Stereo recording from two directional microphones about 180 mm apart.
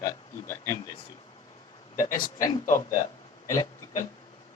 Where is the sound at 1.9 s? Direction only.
50° left (ahead or behind).